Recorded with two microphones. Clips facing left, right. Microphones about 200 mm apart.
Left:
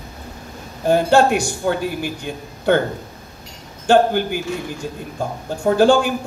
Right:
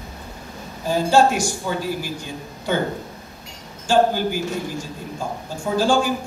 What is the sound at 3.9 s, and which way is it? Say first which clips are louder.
A man's voice: left 3 dB; 60° left (ahead or behind).